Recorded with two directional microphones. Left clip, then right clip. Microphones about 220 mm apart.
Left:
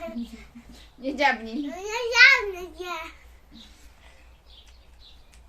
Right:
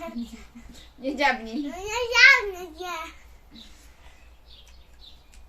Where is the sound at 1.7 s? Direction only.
15° left (ahead or behind).